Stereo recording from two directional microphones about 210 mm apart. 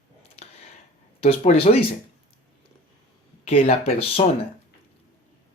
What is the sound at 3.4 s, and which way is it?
Speech, 30° left (ahead or behind).